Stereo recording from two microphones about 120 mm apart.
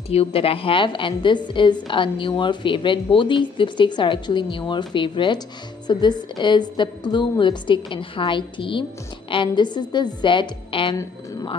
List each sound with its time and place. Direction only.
0.1 s a woman's voice: 55° left (ahead or behind)